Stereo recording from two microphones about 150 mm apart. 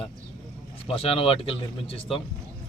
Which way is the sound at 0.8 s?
40° left (ahead or behind).